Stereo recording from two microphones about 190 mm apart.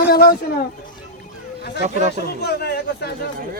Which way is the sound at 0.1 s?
55° left (ahead or behind).